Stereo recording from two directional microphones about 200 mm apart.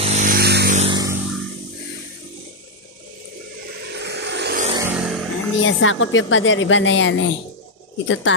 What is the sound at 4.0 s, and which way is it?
Vehicle, 55° right (ahead or behind).